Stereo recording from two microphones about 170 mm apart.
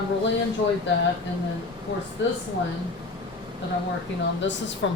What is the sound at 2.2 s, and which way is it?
Speech, 90° left.